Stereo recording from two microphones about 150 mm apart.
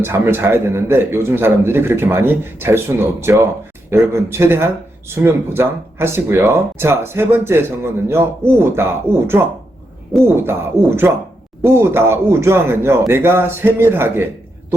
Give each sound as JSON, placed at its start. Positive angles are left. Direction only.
{"t": 0.0, "sound": "a man's voice", "side_deg": -15}